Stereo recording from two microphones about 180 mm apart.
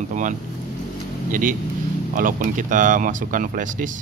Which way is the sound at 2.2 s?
50° right (ahead or behind).